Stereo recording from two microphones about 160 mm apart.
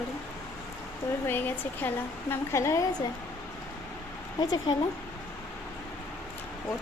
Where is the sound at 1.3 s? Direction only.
10° left (ahead or behind).